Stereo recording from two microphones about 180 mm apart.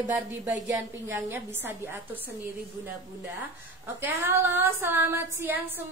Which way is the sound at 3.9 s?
10° right (ahead or behind).